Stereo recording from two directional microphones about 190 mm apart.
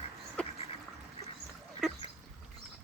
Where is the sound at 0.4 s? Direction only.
5° left (ahead or behind).